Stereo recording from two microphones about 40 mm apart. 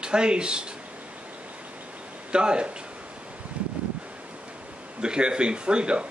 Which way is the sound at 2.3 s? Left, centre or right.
Right.